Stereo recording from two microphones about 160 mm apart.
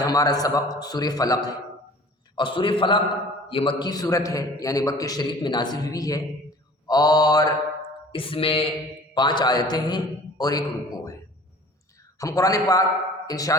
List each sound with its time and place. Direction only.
0.0 s a man's voice: 25° left (ahead or behind)
8.1 s a man's voice: 35° left (ahead or behind)
12.2 s a man's voice: 20° left (ahead or behind)